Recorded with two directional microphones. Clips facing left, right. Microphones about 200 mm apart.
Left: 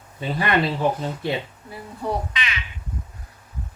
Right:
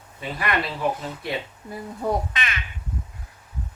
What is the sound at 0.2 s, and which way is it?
Speech, 30° left (ahead or behind).